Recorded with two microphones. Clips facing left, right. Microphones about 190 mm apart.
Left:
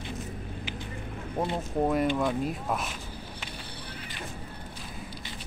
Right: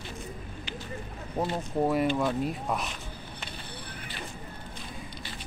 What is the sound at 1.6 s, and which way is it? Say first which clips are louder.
Speech: even; centre (ahead or behind).